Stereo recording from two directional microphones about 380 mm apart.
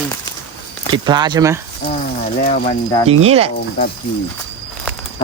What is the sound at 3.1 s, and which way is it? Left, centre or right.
Speech, centre.